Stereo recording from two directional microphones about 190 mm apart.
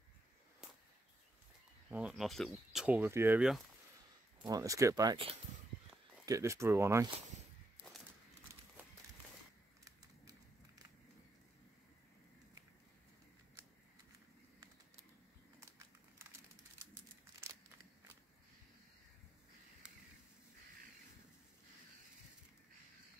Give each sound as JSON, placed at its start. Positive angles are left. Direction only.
{"t": 1.9, "sound": "speech", "side_deg": -5}
{"t": 4.5, "sound": "speech", "side_deg": -15}
{"t": 6.2, "sound": "speech", "side_deg": -15}
{"t": 15.8, "sound": "crumpling", "side_deg": -15}